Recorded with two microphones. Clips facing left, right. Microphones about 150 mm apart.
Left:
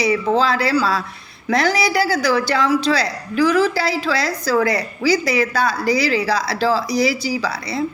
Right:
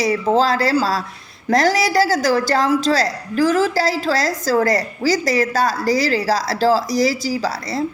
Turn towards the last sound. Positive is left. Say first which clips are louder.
# right 1 dB
turn(degrees=-45)  # may be behind; listen again after turning